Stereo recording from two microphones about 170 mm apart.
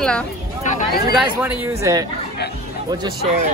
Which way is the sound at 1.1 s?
5° right (ahead or behind).